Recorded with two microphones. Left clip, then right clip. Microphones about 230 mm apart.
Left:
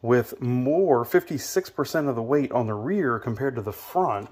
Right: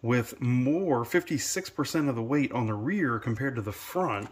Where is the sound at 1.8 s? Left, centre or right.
Centre.